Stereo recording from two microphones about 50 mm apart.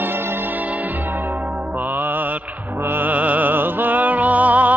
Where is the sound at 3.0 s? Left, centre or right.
Right.